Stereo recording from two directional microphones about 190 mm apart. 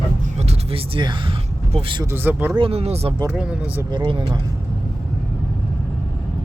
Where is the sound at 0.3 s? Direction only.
35° right (ahead or behind).